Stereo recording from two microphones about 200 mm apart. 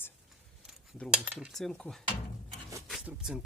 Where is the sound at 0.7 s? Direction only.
5° left (ahead or behind).